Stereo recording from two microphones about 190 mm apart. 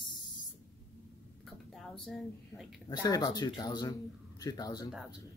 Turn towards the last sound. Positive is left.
turn(degrees=20)  # may be behind; listen again after turning